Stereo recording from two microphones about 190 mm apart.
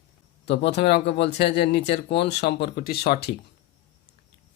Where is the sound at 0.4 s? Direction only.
60° left (ahead or behind).